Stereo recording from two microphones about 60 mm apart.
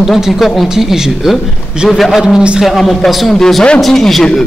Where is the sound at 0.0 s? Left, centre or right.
Centre.